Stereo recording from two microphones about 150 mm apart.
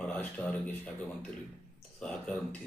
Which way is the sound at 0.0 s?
10° left (ahead or behind).